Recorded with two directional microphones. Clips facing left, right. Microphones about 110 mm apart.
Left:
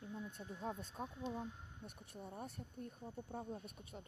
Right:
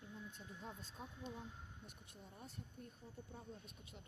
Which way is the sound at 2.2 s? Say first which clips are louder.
Left 7 dB; 55° left (ahead or behind).